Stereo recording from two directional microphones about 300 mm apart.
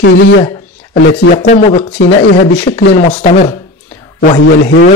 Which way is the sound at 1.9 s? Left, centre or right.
Left.